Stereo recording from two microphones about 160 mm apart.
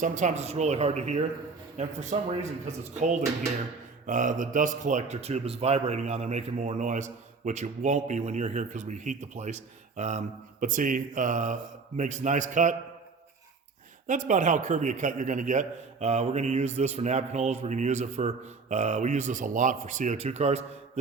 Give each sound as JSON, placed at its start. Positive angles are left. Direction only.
{"t": 0.0, "sound": "a man's voice", "side_deg": -50}
{"t": 14.1, "sound": "a man's voice", "side_deg": -50}